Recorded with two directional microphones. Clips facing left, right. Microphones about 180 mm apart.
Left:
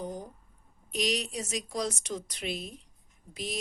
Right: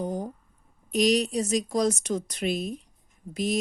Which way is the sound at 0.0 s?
50° right (ahead or behind).